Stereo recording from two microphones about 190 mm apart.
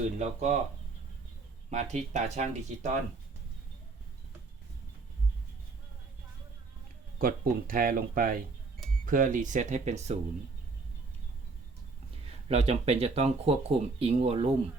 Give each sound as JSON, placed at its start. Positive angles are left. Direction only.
{"t": 0.2, "sound": "speech", "side_deg": -35}
{"t": 1.7, "sound": "speech", "side_deg": -35}
{"t": 7.2, "sound": "speech", "side_deg": -50}
{"t": 12.5, "sound": "speech", "side_deg": -35}